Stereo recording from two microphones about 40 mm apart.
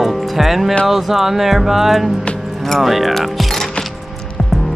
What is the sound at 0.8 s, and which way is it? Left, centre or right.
Speech, centre.